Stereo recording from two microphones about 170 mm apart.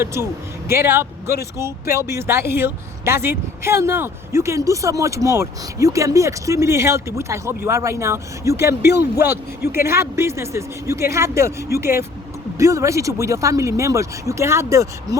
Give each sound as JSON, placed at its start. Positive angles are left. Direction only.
{"t": 0.0, "sound": "speech", "side_deg": -15}
{"t": 8.6, "sound": "speech", "side_deg": 75}
{"t": 9.2, "sound": "speech", "side_deg": -15}